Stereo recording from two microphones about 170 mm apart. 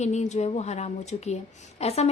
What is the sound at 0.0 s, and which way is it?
A woman's voice, 40° left (ahead or behind).